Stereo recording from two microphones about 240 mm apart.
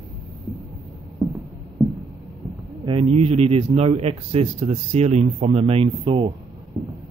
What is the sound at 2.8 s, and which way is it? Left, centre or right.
A man's voice, right.